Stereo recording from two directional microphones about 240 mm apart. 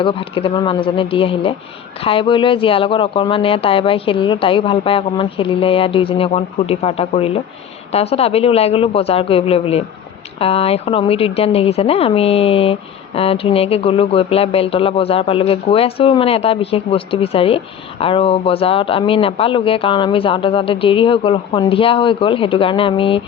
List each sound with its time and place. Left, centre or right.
0.0 s speech: left